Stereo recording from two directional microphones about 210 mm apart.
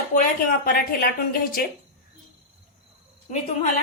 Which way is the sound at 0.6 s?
45° left (ahead or behind).